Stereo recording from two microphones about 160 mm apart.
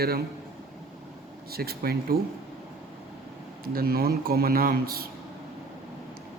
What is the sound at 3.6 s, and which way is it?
A man's voice, 70° right (ahead or behind).